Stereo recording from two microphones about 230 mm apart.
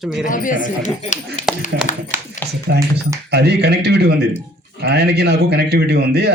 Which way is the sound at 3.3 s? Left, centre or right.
Right.